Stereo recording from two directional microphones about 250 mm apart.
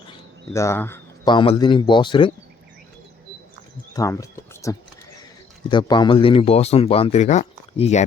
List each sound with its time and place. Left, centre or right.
0.1 s a man's voice: centre
3.9 s speech: centre